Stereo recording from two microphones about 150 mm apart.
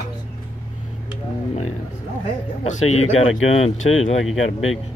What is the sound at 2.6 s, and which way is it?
Speech, 45° left (ahead or behind).